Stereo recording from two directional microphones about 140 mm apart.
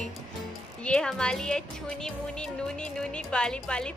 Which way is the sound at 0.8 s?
5° left (ahead or behind).